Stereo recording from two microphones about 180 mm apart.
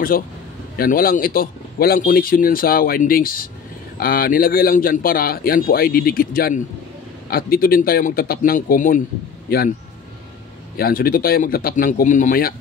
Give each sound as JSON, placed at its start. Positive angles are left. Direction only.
{"t": 0.7, "sound": "a man's voice", "side_deg": 55}
{"t": 10.8, "sound": "speech", "side_deg": 55}